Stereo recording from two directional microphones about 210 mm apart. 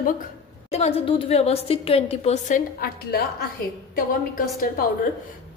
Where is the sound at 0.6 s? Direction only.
30° left (ahead or behind).